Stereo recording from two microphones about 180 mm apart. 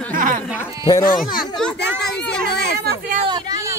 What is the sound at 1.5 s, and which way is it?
Children playing, 5° left (ahead or behind).